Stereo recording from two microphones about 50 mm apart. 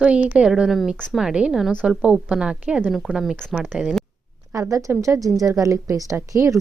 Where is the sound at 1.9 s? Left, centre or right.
Right.